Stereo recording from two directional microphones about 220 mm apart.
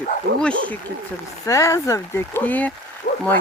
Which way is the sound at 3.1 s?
40° left (ahead or behind).